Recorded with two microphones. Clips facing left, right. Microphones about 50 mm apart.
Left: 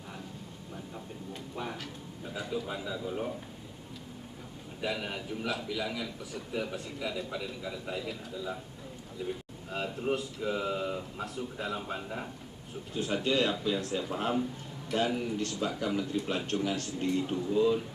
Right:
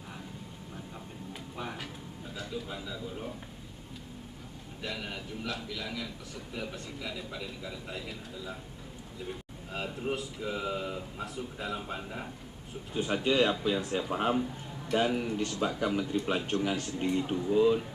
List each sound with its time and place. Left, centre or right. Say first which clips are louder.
0.9 s a sound: left 1 dB; centre
2.3 s a sound: left 4 dB; centre
2.6 s a man's voice: left 4 dB; centre
4.8 s a man's voice: left 4 dB; centre
9.7 s a man's voice: left 2 dB; centre
12.9 s speech: right 1 dB; centre